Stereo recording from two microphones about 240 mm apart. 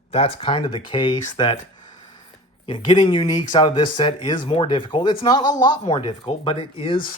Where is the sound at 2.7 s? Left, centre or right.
Centre.